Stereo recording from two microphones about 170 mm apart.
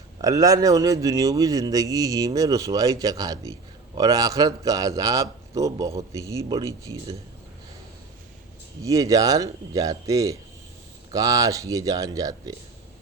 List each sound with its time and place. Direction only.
0.2 s speech: 20° right (ahead or behind)
8.8 s speech: 20° right (ahead or behind)